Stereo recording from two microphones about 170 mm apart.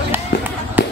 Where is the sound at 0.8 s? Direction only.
10° right (ahead or behind).